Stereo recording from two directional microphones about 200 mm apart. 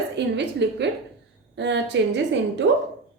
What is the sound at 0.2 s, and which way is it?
A woman's voice, 60° right (ahead or behind).